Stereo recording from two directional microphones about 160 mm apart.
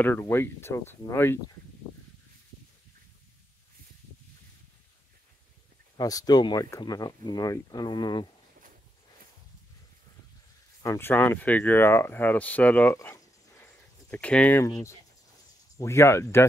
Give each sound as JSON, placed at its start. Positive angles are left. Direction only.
{"t": 0.0, "sound": "speech", "side_deg": 15}
{"t": 5.9, "sound": "speech", "side_deg": 25}
{"t": 10.8, "sound": "speech", "side_deg": 15}
{"t": 14.6, "sound": "speech", "side_deg": 20}